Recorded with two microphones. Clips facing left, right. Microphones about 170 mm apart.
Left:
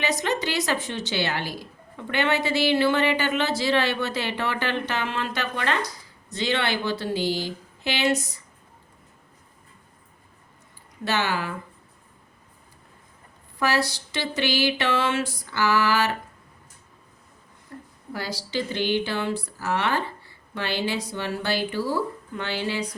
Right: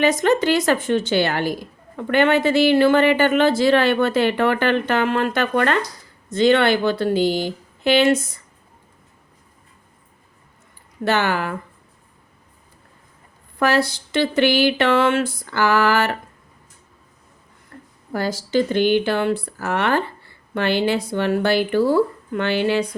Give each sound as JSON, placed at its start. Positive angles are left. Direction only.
{"t": 0.0, "sound": "speech", "side_deg": -50}
{"t": 11.0, "sound": "speech", "side_deg": -55}
{"t": 13.6, "sound": "speech", "side_deg": -55}
{"t": 18.1, "sound": "speech", "side_deg": -50}